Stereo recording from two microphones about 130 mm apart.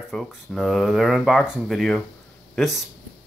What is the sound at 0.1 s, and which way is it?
Speech, centre (ahead or behind).